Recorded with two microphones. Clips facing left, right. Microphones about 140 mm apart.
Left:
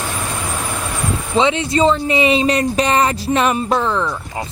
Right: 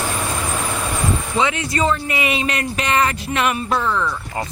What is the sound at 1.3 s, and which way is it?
Speech, 25° left (ahead or behind).